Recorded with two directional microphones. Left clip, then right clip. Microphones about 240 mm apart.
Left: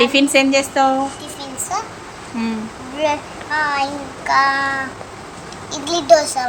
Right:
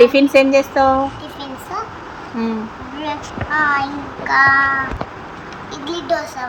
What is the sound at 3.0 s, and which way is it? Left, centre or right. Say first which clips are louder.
Child singing: left 5 dB; left.